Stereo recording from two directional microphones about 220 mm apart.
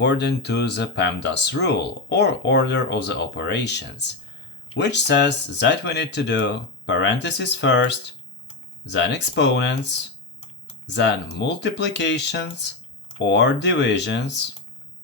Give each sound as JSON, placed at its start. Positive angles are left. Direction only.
{"t": 0.0, "sound": "speech", "side_deg": 50}